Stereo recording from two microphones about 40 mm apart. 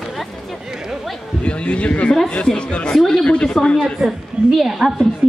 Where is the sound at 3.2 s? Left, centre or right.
Left.